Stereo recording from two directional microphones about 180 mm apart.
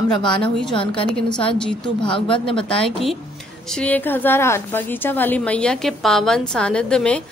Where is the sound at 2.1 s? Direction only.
30° left (ahead or behind).